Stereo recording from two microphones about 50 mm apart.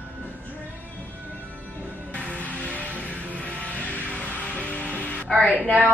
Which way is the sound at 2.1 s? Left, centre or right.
Left.